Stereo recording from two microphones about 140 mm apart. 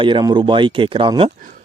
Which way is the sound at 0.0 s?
30° right (ahead or behind).